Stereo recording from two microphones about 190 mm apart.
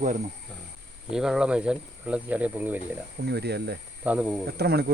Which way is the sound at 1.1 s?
5° right (ahead or behind).